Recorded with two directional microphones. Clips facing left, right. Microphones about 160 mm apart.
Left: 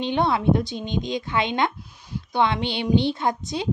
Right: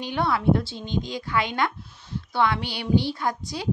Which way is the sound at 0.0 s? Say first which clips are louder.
Left 2 dB; 20° left (ahead or behind).